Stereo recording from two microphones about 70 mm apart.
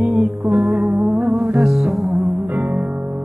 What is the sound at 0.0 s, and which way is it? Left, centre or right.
Music, centre.